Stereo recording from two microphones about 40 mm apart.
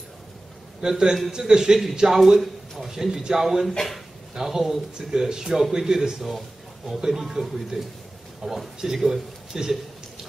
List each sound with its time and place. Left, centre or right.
0.7 s a man's voice: centre
3.4 s speech: centre